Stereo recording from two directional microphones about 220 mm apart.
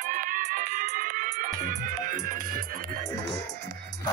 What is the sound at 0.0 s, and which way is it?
Music, 35° right (ahead or behind).